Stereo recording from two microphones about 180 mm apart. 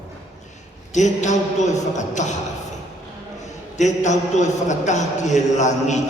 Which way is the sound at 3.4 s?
40° left (ahead or behind).